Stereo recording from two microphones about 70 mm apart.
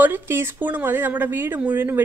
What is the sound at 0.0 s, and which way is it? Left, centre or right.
Speech, right.